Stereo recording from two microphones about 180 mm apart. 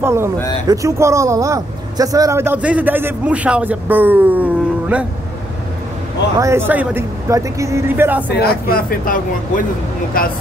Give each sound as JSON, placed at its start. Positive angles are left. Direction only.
{"t": 0.0, "sound": "speech", "side_deg": -15}
{"t": 6.3, "sound": "speech", "side_deg": -15}
{"t": 8.4, "sound": "speech", "side_deg": 55}